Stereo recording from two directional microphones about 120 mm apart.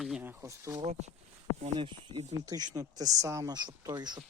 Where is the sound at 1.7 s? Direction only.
40° right (ahead or behind).